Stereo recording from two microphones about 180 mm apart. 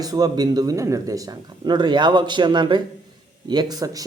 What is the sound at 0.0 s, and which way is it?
A man's voice, 20° right (ahead or behind).